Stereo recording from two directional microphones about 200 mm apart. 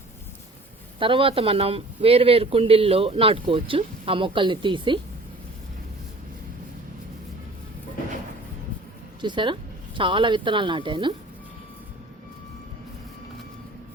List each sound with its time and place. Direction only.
0.9 s speech: 25° right (ahead or behind)
9.2 s speech: 25° right (ahead or behind)